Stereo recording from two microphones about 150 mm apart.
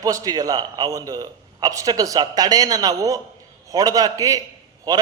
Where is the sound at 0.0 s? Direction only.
25° right (ahead or behind).